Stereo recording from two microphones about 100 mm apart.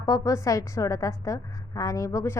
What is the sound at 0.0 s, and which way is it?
A woman's voice, 35° left (ahead or behind).